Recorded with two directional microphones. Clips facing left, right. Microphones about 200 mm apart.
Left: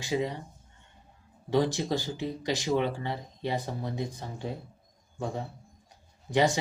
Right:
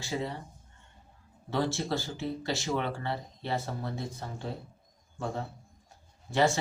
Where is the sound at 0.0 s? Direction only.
15° left (ahead or behind).